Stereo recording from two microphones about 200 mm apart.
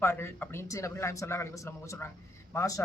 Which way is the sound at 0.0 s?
10° left (ahead or behind).